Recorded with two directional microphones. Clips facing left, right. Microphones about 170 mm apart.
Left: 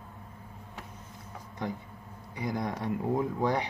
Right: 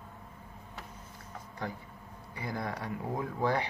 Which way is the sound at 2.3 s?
20° left (ahead or behind).